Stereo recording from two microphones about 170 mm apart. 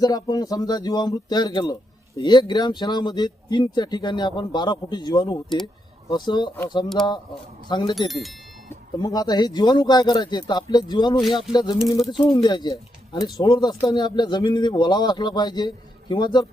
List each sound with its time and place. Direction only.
0.0 s speech: 25° left (ahead or behind)
7.9 s speech: centre (ahead or behind)
9.0 s speech: 25° left (ahead or behind)